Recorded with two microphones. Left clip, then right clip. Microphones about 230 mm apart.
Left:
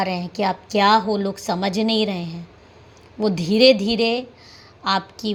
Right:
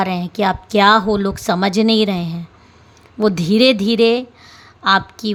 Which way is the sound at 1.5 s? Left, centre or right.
Right.